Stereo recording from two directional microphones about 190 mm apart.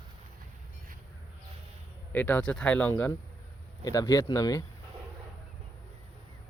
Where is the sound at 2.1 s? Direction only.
10° left (ahead or behind).